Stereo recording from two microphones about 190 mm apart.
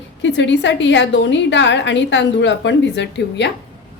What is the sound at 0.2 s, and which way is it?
A woman's voice, 70° left (ahead or behind).